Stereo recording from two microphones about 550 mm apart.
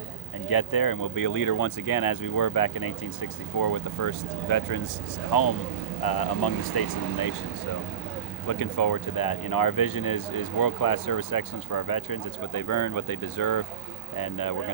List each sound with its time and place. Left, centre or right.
0.4 s speech: left
8.4 s speech: left